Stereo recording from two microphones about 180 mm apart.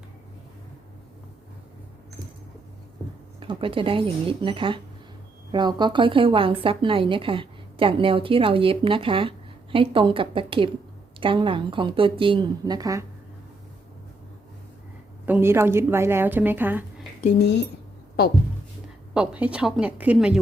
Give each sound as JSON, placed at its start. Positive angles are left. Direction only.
{"t": 3.4, "sound": "speech", "side_deg": -30}
{"t": 15.3, "sound": "a woman's voice", "side_deg": -15}
{"t": 18.2, "sound": "speech", "side_deg": 60}
{"t": 19.1, "sound": "speech", "side_deg": -5}